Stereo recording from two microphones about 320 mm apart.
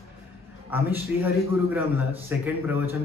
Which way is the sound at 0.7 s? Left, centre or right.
Centre.